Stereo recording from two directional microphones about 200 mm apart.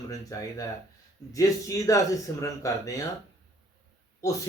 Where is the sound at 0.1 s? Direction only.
15° left (ahead or behind).